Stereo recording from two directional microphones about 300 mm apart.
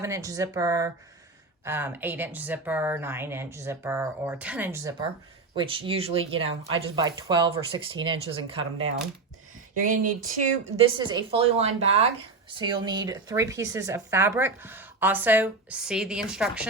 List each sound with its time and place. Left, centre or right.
0.0 s speech: centre
9.9 s a woman's voice: right; by 16.6 s centre